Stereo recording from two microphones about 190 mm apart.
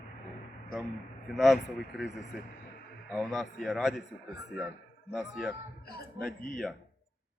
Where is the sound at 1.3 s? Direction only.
Centre (ahead or behind).